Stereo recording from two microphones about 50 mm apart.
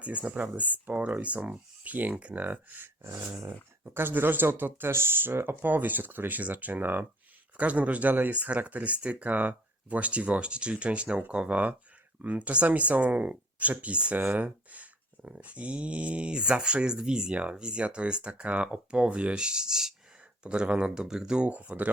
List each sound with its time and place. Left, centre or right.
0.0 s speech: right
2.8 s a sound: right
3.5 s speech: right
5.6 s speech: right